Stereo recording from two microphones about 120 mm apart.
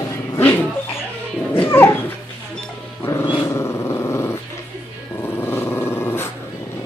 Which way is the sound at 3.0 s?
25° left (ahead or behind).